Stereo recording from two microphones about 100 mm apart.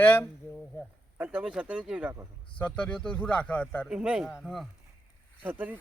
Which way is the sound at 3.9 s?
10° right (ahead or behind).